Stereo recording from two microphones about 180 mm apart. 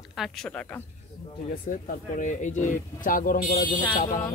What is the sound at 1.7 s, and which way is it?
Speech, 45° left (ahead or behind).